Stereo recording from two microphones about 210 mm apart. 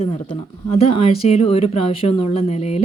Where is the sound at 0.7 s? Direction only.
25° left (ahead or behind).